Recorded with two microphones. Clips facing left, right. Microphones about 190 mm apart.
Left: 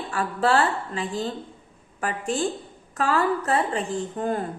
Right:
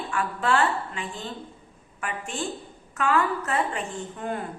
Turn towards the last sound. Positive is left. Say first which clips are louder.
# left 5 dB
turn(degrees=35)  # may be behind; listen again after turning